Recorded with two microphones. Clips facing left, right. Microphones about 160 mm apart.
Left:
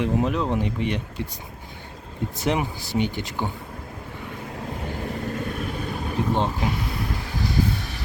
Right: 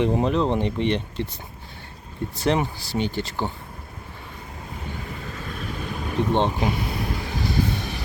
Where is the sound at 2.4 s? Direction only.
15° left (ahead or behind).